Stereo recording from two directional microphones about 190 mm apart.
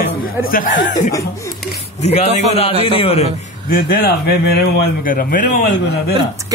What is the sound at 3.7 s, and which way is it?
Speech, 50° left (ahead or behind).